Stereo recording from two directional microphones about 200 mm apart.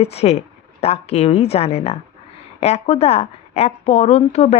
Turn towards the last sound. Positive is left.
turn(degrees=35)  # may be behind; listen again after turning